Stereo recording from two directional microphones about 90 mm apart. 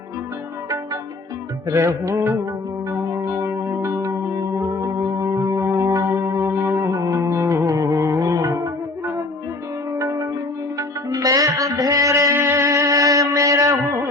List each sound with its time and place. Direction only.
1.7 s music: 35° right (ahead or behind)
12.3 s music: 25° right (ahead or behind)
12.6 s music: 40° right (ahead or behind)